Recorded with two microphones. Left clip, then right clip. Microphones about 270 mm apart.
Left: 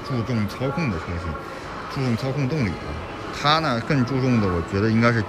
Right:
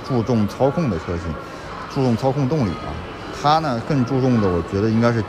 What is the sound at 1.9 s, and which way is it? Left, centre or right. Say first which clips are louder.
Speech: right 8 dB; centre.